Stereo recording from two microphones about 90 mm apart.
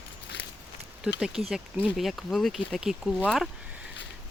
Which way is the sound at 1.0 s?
5° right (ahead or behind).